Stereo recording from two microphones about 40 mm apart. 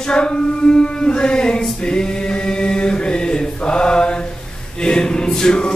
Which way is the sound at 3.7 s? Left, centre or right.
Left.